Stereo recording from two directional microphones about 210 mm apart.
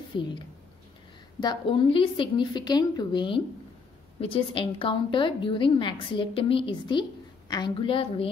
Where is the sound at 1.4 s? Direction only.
20° left (ahead or behind).